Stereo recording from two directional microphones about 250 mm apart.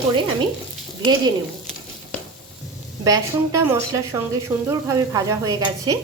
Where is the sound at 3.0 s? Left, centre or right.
Centre.